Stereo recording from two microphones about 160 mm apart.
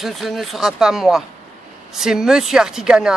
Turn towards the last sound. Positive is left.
turn(degrees=-5)  # may be behind; listen again after turning